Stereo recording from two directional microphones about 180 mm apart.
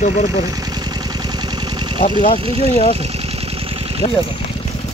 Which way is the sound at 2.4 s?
30° right (ahead or behind).